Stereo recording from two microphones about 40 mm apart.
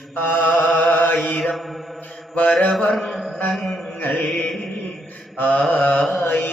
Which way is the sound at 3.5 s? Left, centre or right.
Centre.